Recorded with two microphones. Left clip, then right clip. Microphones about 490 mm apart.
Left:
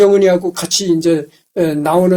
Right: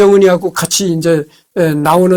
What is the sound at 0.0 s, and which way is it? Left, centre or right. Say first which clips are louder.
Speech: right 2 dB; right.